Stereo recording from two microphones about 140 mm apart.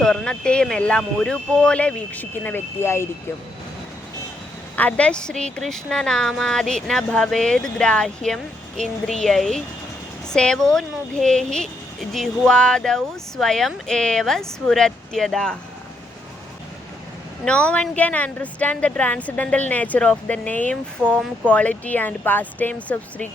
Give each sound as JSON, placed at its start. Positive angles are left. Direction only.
{"t": 0.0, "sound": "speech", "side_deg": 5}
{"t": 4.8, "sound": "speech", "side_deg": 10}
{"t": 17.4, "sound": "speech", "side_deg": 10}